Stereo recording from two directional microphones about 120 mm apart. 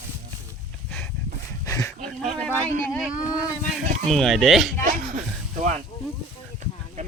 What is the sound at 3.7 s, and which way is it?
Speech, centre (ahead or behind).